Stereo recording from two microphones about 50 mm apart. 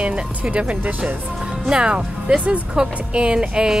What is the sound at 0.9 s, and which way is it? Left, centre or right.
Speech, right.